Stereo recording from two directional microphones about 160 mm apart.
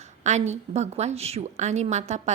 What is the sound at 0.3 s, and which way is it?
A woman's voice, 45° right (ahead or behind).